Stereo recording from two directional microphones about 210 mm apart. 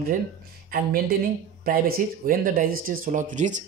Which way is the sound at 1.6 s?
45° right (ahead or behind).